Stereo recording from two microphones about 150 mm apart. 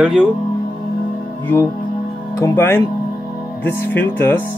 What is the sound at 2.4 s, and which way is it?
Speech, 15° left (ahead or behind).